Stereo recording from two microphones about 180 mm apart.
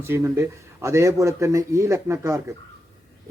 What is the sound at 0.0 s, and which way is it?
Speech, 15° right (ahead or behind).